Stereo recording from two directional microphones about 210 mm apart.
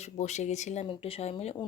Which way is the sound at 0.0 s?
35° left (ahead or behind).